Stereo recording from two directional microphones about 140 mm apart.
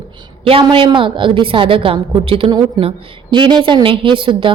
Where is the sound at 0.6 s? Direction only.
35° right (ahead or behind).